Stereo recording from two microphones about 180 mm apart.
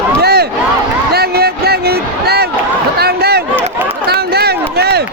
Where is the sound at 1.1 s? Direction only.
60° right (ahead or behind).